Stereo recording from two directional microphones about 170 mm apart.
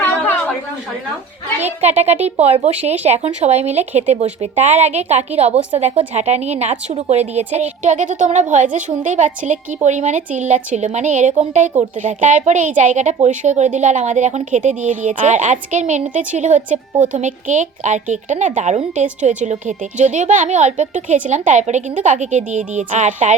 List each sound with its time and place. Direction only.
1.8 s a woman's voice: 40° right (ahead or behind)